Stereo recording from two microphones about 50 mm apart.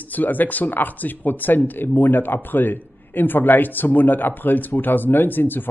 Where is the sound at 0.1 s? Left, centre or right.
Left.